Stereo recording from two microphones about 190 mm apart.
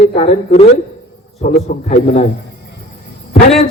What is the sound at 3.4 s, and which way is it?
Speech, 35° left (ahead or behind).